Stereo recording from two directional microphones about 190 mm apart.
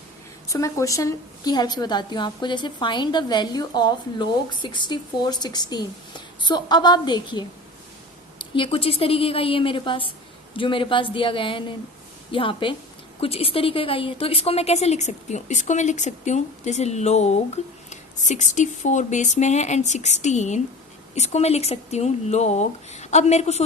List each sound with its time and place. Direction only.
0.4 s a woman's voice: 15° left (ahead or behind); by 23.6 s 35° left (ahead or behind)